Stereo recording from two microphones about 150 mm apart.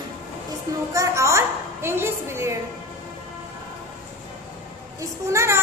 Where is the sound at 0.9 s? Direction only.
20° right (ahead or behind).